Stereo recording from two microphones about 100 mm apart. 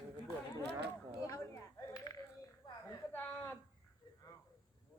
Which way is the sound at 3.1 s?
20° left (ahead or behind).